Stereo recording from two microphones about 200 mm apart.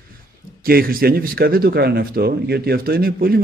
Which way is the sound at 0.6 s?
50° right (ahead or behind).